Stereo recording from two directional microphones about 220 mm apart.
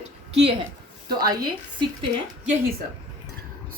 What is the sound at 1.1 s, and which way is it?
Speech, 15° right (ahead or behind).